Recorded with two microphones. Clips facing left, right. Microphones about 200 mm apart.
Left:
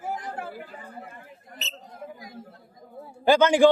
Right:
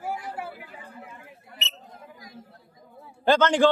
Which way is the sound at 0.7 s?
50° left (ahead or behind).